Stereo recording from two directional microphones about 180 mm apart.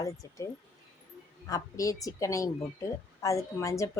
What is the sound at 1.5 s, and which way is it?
Speech, 20° left (ahead or behind).